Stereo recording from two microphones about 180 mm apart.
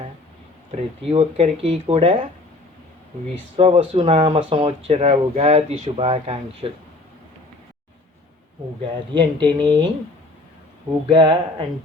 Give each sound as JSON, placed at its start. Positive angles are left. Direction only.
{"t": 1.1, "sound": "speech", "side_deg": -35}
{"t": 3.6, "sound": "speech", "side_deg": -30}
{"t": 9.1, "sound": "speech", "side_deg": -25}
{"t": 11.1, "sound": "speech", "side_deg": -25}